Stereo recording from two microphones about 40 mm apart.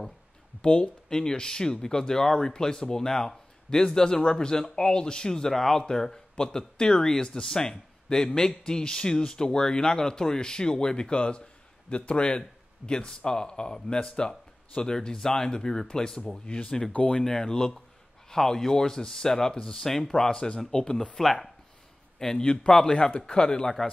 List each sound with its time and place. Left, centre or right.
0.6 s a man's voice: left
17.2 s speech: centre
21.2 s speech: centre
22.4 s a man's voice: left